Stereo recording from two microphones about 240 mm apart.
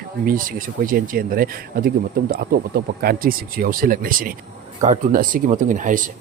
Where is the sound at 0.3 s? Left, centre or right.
Right.